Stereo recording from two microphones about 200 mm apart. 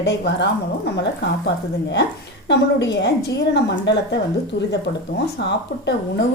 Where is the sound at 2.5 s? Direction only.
60° left (ahead or behind).